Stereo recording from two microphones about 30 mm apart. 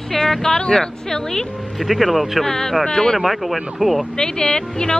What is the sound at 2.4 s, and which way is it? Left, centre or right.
Speech, centre.